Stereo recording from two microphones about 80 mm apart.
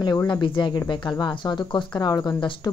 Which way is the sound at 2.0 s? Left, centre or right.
Left.